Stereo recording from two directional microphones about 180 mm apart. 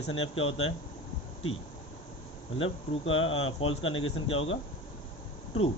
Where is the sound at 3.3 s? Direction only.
30° left (ahead or behind).